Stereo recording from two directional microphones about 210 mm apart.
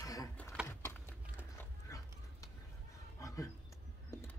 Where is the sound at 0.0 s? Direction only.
15° left (ahead or behind).